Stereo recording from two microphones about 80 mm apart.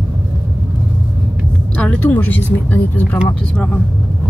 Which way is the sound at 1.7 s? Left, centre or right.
Centre.